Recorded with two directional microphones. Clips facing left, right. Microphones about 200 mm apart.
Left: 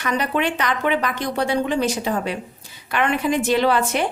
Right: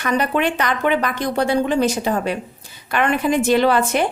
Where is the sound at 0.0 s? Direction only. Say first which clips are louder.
Right 3 dB; 50° right (ahead or behind).